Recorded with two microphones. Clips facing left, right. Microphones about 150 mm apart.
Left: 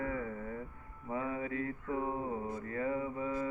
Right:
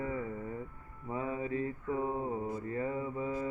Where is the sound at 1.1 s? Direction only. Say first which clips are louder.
Right 2 dB; 30° right (ahead or behind).